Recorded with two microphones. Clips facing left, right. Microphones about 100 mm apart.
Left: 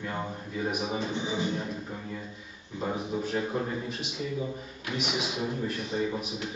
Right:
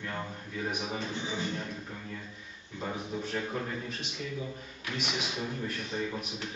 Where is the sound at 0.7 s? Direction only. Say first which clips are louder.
Left 4 dB; 5° left (ahead or behind).